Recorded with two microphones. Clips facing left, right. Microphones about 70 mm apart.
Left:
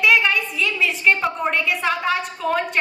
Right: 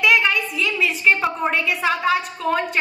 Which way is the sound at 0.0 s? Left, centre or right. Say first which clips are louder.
Even; centre.